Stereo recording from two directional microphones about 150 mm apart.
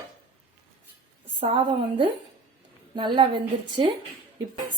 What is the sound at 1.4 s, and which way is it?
A woman's voice, 35° right (ahead or behind).